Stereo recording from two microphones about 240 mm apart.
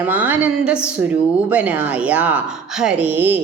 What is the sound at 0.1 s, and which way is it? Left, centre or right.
A woman's voice, centre.